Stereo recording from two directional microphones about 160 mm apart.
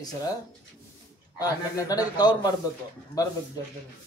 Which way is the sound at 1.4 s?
25° left (ahead or behind).